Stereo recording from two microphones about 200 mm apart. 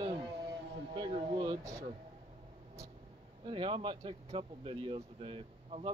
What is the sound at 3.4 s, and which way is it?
Speech, 25° right (ahead or behind).